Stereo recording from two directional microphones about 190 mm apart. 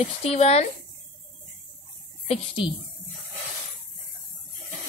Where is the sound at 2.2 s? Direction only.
30° left (ahead or behind).